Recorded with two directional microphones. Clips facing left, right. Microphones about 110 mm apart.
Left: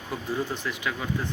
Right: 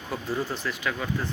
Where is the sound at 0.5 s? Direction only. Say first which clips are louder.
Right 1 dB; 20° left (ahead or behind).